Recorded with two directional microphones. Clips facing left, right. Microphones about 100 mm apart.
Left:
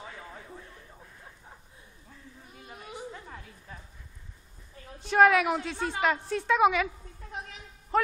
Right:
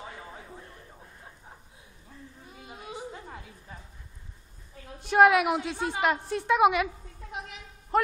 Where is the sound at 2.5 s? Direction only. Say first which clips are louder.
Right 2 dB; 20° right (ahead or behind).